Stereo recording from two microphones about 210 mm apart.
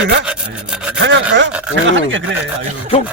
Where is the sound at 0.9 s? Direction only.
60° right (ahead or behind).